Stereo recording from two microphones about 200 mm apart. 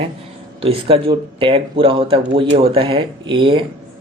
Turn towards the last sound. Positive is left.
turn(degrees=-25)  # may be behind; listen again after turning